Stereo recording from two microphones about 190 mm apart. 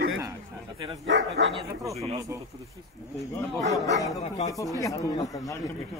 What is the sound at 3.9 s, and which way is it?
Speech, 20° left (ahead or behind).